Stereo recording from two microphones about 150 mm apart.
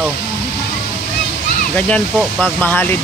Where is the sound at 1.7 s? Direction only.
10° left (ahead or behind).